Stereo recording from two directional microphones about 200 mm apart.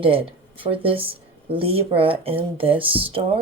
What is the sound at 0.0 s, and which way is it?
Speech, 25° right (ahead or behind).